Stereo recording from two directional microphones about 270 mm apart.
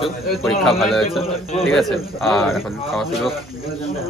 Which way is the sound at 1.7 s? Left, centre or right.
Centre.